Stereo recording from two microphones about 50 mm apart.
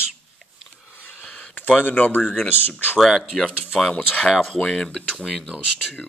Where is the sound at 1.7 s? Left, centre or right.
Left.